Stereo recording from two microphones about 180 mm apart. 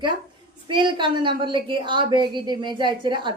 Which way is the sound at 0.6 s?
25° right (ahead or behind).